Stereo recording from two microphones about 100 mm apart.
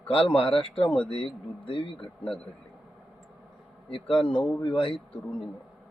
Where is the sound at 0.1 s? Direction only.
70° left (ahead or behind).